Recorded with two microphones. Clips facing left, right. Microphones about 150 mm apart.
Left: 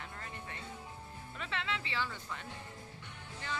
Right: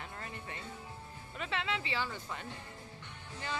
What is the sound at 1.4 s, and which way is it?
Speech, 15° right (ahead or behind).